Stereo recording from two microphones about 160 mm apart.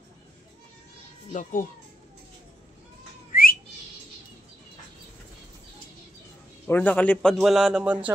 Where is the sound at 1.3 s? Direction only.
55° left (ahead or behind).